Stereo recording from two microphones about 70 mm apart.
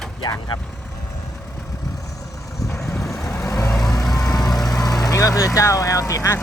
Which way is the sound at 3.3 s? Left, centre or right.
Left.